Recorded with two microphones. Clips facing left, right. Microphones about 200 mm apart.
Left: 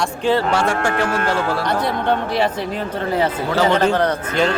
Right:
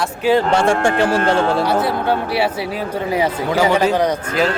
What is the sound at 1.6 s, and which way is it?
Speech, 5° right (ahead or behind).